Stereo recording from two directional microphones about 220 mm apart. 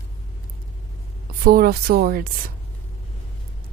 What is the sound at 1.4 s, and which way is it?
Speech, 45° right (ahead or behind).